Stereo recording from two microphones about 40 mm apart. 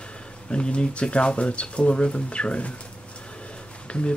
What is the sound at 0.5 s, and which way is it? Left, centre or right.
Speech, left.